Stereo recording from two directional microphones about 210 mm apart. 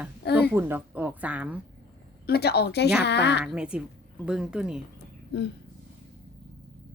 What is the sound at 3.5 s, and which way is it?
Speech, 5° right (ahead or behind).